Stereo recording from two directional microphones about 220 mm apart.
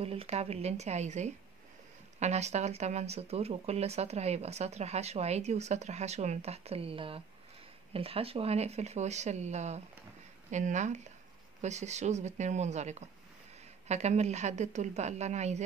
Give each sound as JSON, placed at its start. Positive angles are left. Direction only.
{"t": 0.0, "sound": "a woman's voice", "side_deg": -25}